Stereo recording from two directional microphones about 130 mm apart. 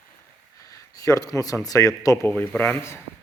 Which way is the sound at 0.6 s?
25° left (ahead or behind).